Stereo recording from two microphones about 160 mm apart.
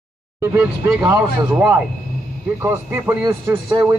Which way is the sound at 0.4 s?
15° right (ahead or behind).